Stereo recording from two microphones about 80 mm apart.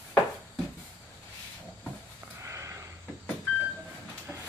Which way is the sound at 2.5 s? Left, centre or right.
Right.